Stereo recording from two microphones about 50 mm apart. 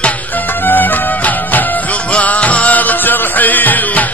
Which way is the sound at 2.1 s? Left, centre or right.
Left.